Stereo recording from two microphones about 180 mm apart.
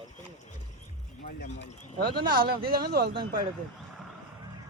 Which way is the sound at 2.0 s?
55° right (ahead or behind).